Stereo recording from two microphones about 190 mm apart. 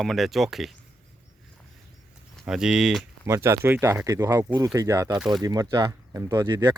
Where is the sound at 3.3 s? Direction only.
15° right (ahead or behind).